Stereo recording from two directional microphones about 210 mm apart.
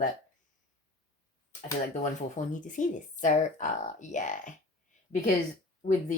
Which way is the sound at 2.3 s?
35° left (ahead or behind).